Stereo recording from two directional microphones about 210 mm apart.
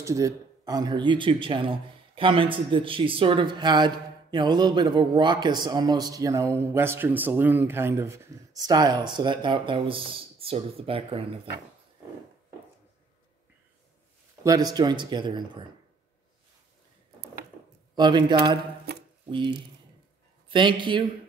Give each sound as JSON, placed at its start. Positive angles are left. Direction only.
{"t": 0.0, "sound": "speech", "side_deg": -15}
{"t": 14.4, "sound": "speech", "side_deg": -15}
{"t": 17.9, "sound": "speech", "side_deg": -20}